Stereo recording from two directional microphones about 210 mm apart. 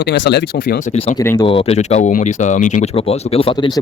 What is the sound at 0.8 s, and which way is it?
Speech, 30° left (ahead or behind).